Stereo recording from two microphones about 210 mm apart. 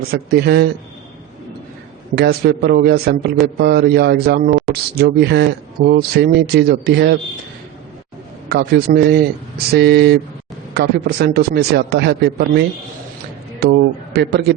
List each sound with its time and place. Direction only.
0.1 s speech: 50° right (ahead or behind)
2.1 s speech: 50° right (ahead or behind)
8.4 s speech: 50° right (ahead or behind)